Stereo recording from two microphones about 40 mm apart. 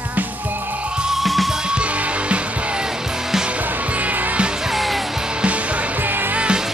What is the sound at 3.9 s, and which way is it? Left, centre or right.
Music, right.